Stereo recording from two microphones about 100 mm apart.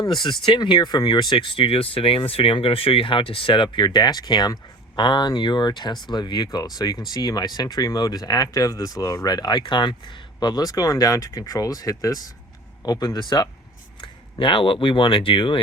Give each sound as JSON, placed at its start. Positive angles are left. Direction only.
{"t": 0.0, "sound": "speech", "side_deg": 50}
{"t": 14.0, "sound": "speech", "side_deg": 60}